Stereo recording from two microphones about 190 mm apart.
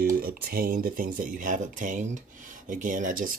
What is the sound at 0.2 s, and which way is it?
Speech, 50° right (ahead or behind).